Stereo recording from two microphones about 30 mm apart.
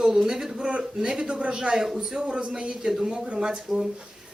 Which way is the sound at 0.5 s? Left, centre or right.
Right.